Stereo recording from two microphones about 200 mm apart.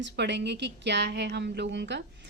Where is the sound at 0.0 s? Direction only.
60° right (ahead or behind).